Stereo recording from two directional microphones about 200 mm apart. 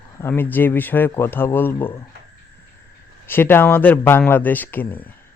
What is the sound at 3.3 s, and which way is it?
Speech, 10° left (ahead or behind).